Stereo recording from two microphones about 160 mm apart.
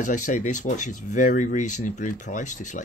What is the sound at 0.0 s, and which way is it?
Speech, 50° left (ahead or behind).